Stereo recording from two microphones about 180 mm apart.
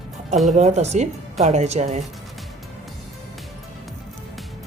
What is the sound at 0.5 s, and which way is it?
A woman's voice, 40° right (ahead or behind).